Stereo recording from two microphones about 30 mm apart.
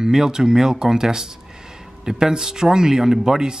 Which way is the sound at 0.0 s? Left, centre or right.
Centre.